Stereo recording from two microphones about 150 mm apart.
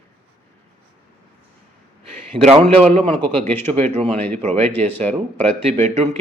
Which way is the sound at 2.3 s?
30° right (ahead or behind).